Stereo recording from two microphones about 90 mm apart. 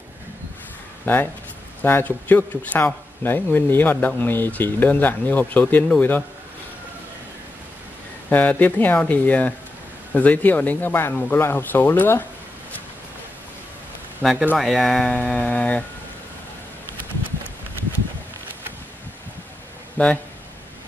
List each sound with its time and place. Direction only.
1.0 s speech: 20° left (ahead or behind)
8.3 s speech: 20° left (ahead or behind)
14.2 s speech: 10° left (ahead or behind)
14.6 s speech: centre (ahead or behind); by 15.8 s 15° left (ahead or behind)
20.0 s speech: 15° left (ahead or behind)